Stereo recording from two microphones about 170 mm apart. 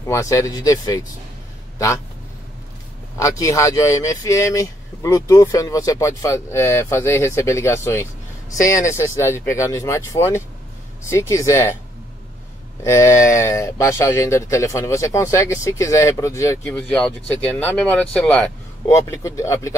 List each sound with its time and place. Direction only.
0.0 s speech: 20° left (ahead or behind)
3.2 s speech: 20° left (ahead or behind)
12.8 s speech: 15° left (ahead or behind)
16.6 s speech: 5° left (ahead or behind)